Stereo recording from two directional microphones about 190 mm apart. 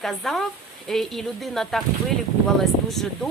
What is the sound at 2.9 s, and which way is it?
Speech, centre (ahead or behind).